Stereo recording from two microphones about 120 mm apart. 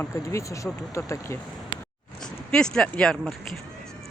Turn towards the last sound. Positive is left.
turn(degrees=5)  # may be behind; listen again after turning